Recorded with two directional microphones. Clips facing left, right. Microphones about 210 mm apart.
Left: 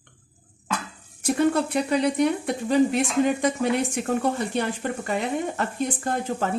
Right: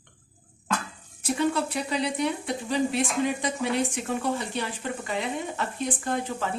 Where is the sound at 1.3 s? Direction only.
50° left (ahead or behind).